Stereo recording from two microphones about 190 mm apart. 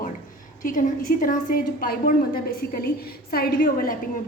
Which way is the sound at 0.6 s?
45° left (ahead or behind).